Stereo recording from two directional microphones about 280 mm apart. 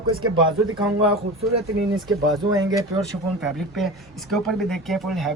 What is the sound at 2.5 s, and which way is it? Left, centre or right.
Speech, centre.